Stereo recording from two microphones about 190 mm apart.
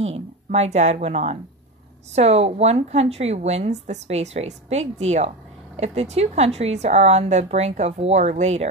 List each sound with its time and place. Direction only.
0.0 s a woman's voice: 35° right (ahead or behind)